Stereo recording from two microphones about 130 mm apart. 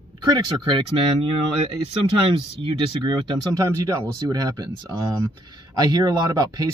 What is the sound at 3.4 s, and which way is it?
Speech, 25° right (ahead or behind).